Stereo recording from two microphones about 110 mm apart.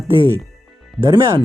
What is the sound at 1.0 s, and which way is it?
Speech, 40° right (ahead or behind).